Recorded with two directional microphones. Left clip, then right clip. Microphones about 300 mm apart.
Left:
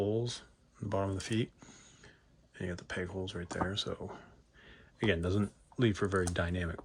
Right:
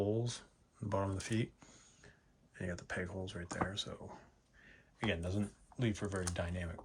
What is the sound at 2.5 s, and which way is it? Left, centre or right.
Speech, centre.